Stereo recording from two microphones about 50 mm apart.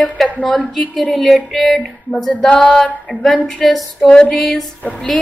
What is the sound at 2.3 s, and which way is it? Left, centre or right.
Speech, left.